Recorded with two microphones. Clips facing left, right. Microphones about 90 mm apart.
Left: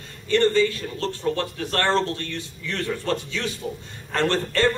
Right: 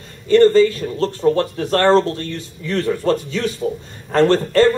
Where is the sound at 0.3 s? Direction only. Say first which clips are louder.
Right 8 dB; 40° right (ahead or behind).